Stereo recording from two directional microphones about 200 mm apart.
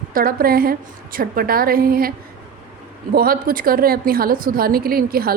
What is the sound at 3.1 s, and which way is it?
A woman's voice, 45° right (ahead or behind).